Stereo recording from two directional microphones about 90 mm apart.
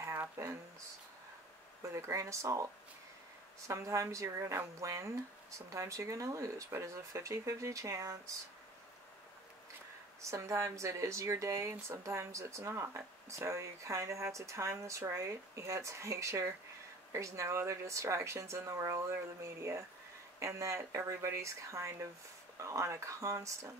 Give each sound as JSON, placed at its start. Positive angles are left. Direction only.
{"t": 0.0, "sound": "a sound", "side_deg": -30}
{"t": 1.8, "sound": "speech", "side_deg": -35}
{"t": 10.3, "sound": "speech", "side_deg": -35}